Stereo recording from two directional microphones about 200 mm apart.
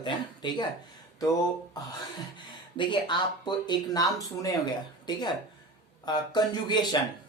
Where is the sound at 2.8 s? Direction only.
25° left (ahead or behind).